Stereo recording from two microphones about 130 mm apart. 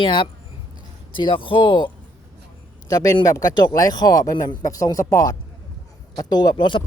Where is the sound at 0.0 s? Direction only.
40° left (ahead or behind).